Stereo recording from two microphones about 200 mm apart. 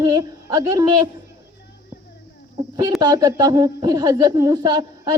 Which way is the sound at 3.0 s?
20° right (ahead or behind).